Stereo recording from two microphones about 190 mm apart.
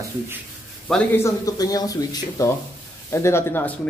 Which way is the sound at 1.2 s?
20° left (ahead or behind).